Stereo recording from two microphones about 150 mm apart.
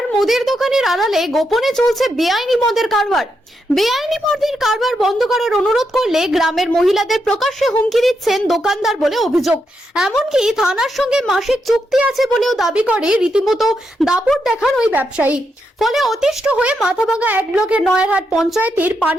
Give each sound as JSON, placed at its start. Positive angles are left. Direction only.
{"t": 0.2, "sound": "a woman's voice", "side_deg": 0}
{"t": 15.8, "sound": "a woman's voice", "side_deg": 0}